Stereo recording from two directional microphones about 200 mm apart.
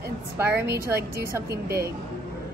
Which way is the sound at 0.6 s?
55° right (ahead or behind).